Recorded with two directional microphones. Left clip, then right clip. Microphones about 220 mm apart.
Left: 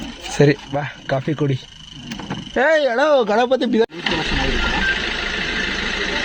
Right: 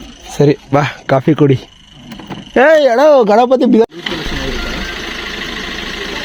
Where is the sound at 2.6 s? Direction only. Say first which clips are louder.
Right 8 dB; 35° right (ahead or behind).